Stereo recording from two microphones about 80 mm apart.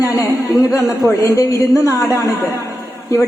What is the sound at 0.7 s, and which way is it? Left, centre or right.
A woman's voice, left.